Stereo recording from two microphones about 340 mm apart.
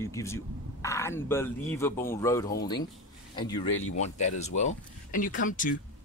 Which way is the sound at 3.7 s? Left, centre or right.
Left.